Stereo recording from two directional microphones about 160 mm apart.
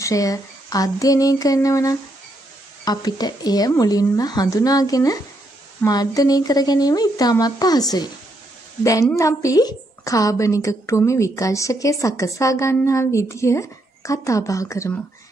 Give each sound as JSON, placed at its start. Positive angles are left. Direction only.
{"t": 0.0, "sound": "a woman's voice", "side_deg": 20}
{"t": 9.1, "sound": "a woman's voice", "side_deg": 20}